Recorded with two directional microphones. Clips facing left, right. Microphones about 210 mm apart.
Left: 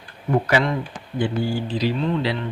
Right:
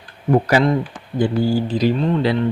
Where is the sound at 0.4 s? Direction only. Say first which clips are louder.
Right 5 dB; 35° right (ahead or behind).